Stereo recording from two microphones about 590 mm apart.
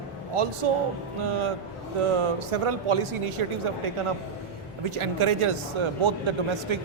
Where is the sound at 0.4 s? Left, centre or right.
Right.